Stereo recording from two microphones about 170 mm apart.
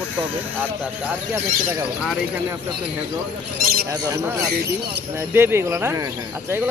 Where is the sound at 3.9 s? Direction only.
20° right (ahead or behind).